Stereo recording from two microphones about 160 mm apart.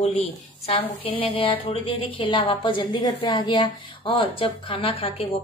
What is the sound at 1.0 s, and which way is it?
Speech, 35° left (ahead or behind).